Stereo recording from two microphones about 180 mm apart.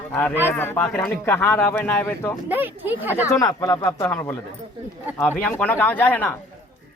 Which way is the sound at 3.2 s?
20° left (ahead or behind).